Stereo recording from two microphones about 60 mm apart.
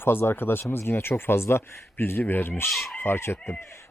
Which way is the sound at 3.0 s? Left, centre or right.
Left.